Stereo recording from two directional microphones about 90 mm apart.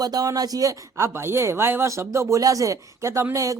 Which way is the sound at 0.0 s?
45° right (ahead or behind).